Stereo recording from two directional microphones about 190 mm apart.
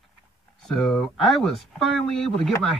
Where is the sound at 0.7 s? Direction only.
Centre (ahead or behind).